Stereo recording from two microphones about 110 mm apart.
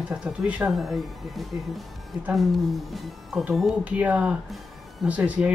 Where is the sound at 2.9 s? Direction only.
5° right (ahead or behind).